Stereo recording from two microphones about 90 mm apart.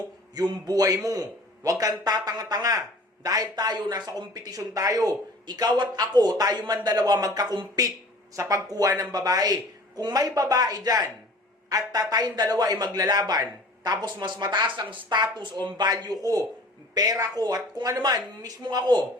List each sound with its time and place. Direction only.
0.3 s a man's voice: 50° right (ahead or behind)